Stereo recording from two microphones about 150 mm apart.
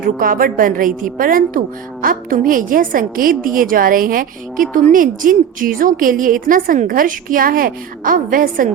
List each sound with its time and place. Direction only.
0.0 s a woman's voice: 70° right (ahead or behind)